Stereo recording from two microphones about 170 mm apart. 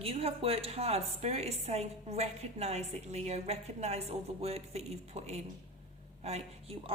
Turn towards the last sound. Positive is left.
turn(degrees=-35)  # may be behind; listen again after turning